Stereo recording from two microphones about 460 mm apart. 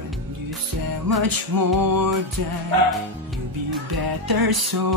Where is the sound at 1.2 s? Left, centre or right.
Right.